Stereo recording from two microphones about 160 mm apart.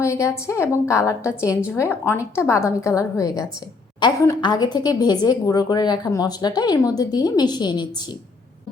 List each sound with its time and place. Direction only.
0.0 s a woman's voice: 20° left (ahead or behind)